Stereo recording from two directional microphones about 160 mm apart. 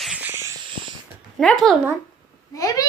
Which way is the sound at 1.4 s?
Centre (ahead or behind).